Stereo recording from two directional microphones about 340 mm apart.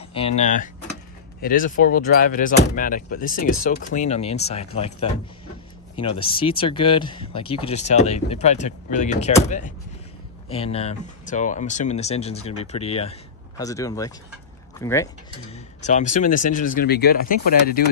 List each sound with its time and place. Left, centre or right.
0.4 s speech: left
6.2 s speech: centre
15.5 s speech: left